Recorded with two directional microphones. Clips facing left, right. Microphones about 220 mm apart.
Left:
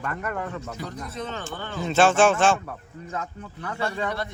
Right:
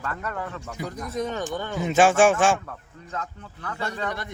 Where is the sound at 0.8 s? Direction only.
10° right (ahead or behind).